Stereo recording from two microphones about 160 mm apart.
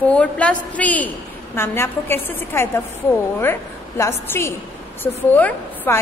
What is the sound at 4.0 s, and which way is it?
A woman's voice, 15° left (ahead or behind).